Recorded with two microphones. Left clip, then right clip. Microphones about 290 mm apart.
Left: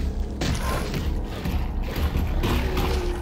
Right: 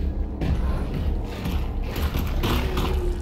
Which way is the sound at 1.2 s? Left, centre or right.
Centre.